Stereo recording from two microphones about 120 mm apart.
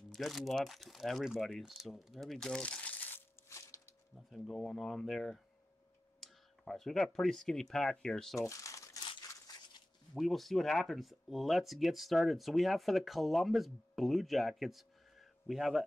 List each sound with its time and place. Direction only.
0.1 s speech: centre (ahead or behind); by 3.8 s 25° left (ahead or behind)
4.3 s speech: 5° left (ahead or behind)
8.4 s crumpling: 25° left (ahead or behind)
9.3 s a sound: 30° left (ahead or behind)
10.1 s speech: centre (ahead or behind)